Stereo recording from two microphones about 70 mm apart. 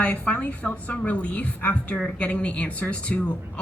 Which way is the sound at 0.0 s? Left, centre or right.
Centre.